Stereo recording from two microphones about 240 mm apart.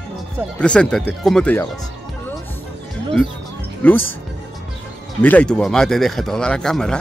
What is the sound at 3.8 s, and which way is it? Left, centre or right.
Speech, centre.